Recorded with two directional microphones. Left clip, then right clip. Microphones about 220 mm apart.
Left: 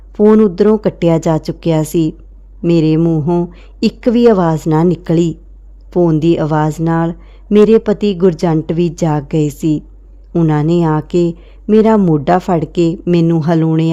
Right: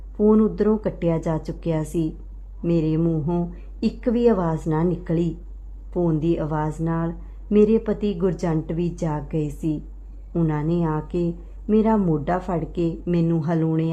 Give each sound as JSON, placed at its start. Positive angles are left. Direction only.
{"t": 0.2, "sound": "speech", "side_deg": 35}